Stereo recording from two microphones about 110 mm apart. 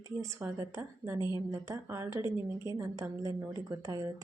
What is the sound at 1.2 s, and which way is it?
Speech, 40° left (ahead or behind).